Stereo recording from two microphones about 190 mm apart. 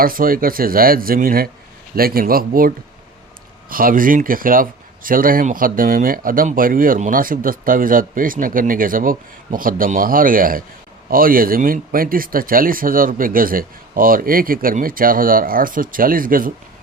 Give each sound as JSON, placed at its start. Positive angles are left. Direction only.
{"t": 0.0, "sound": "speech", "side_deg": -50}